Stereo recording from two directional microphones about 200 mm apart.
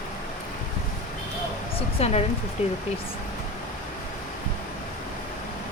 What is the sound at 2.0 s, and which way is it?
Speech, 30° left (ahead or behind).